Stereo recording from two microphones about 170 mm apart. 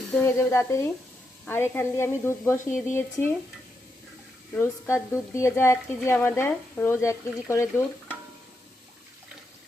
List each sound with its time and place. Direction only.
0.1 s speech: 15° left (ahead or behind)
4.5 s speech: 15° left (ahead or behind)